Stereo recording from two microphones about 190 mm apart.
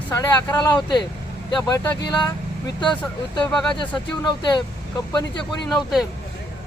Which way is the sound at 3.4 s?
5° left (ahead or behind).